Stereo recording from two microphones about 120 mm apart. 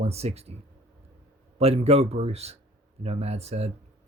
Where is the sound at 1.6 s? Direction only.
60° right (ahead or behind).